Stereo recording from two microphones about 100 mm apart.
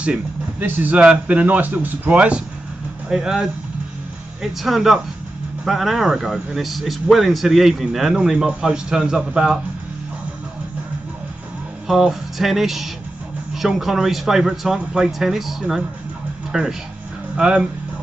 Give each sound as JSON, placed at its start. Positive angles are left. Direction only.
{"t": 0.0, "sound": "speech", "side_deg": -15}
{"t": 11.9, "sound": "speech", "side_deg": -5}